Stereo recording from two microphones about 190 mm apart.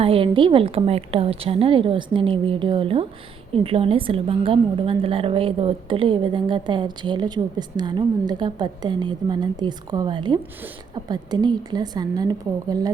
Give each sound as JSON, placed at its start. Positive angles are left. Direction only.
{"t": 0.0, "sound": "a woman's voice", "side_deg": -30}